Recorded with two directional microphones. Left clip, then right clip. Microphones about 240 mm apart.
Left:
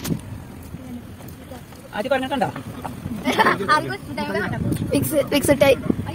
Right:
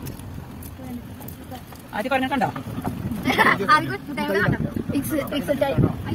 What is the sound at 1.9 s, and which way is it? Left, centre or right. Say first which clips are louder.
Speech: left 1 dB; left.